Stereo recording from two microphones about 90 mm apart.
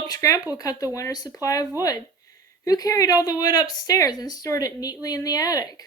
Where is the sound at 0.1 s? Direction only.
40° left (ahead or behind).